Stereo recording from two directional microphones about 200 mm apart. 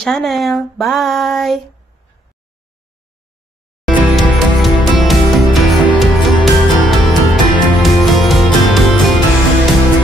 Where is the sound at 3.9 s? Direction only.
Centre (ahead or behind).